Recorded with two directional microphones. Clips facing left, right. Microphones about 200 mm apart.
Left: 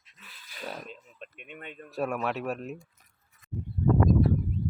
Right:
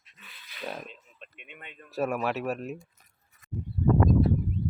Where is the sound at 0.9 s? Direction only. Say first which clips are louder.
Left 5 dB; 45° left (ahead or behind).